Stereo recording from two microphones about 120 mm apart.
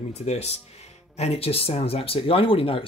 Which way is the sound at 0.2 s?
65° left (ahead or behind).